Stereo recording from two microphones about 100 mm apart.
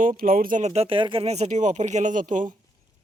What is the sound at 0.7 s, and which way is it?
Speech, 70° right (ahead or behind).